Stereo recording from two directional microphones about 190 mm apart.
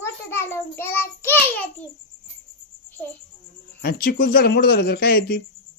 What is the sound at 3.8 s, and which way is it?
Speech, 50° left (ahead or behind).